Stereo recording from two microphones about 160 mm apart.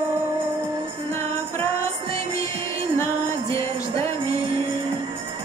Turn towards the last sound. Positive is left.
turn(degrees=20)  # may be behind; listen again after turning